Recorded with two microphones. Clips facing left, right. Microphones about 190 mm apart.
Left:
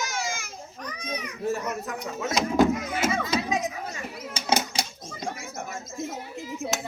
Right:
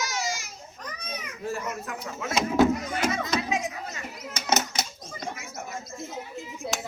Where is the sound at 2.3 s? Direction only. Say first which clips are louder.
Even; 5° right (ahead or behind).